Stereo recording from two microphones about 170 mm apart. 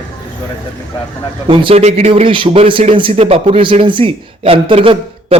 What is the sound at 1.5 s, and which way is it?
Speech, 30° right (ahead or behind).